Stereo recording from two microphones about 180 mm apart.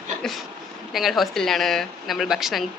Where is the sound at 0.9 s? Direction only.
Centre (ahead or behind).